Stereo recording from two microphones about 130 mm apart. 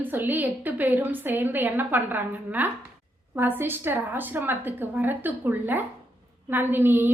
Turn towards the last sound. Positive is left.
turn(degrees=-15)  # may be behind; listen again after turning